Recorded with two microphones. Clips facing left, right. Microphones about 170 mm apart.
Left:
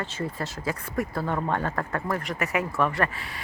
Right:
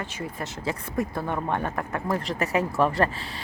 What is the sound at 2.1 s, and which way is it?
Speech, 30° right (ahead or behind).